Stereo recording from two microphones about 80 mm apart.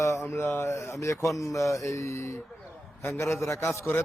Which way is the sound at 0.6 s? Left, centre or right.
Left.